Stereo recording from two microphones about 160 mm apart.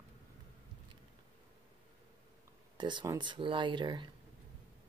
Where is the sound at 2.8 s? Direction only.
30° right (ahead or behind).